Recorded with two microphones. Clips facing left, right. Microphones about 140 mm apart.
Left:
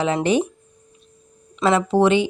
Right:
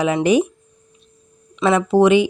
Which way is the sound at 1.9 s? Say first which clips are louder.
Right 6 dB; 15° right (ahead or behind).